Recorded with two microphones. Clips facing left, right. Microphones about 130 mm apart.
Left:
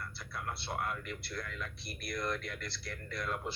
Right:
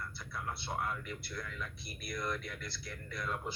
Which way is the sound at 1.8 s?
60° left (ahead or behind).